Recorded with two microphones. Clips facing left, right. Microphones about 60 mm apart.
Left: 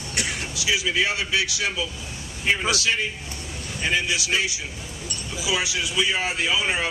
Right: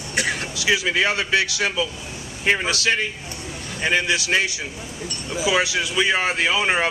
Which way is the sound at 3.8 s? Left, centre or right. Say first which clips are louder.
Right 4 dB; right.